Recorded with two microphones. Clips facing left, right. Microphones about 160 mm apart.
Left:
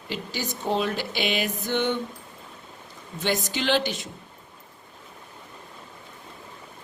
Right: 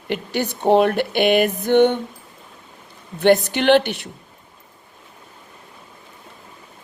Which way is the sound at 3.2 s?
60° right (ahead or behind).